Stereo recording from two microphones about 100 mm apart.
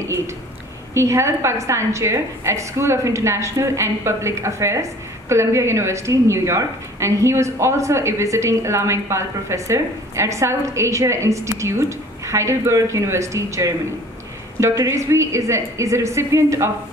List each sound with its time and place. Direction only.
0.9 s a woman's voice: 30° right (ahead or behind)